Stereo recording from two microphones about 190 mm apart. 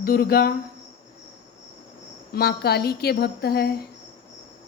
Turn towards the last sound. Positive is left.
turn(degrees=55)  # may be behind; listen again after turning